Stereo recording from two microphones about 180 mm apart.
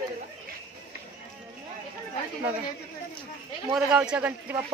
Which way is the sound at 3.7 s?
5° right (ahead or behind).